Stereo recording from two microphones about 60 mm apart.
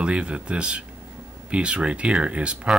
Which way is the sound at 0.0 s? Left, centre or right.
Centre.